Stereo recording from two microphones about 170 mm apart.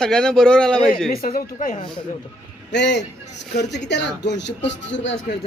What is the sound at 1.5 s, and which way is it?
Speech, 45° left (ahead or behind).